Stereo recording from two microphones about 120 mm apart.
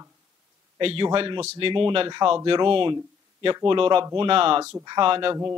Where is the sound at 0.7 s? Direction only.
45° right (ahead or behind).